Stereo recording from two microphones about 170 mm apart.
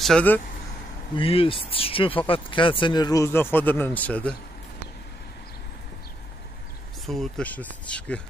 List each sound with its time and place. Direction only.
0.0 s speech: 5° left (ahead or behind)
1.1 s speech: 35° left (ahead or behind); by 4.4 s 10° left (ahead or behind)
7.1 s speech: 5° left (ahead or behind)